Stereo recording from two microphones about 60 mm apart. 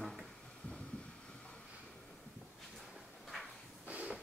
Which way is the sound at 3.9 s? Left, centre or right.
Right.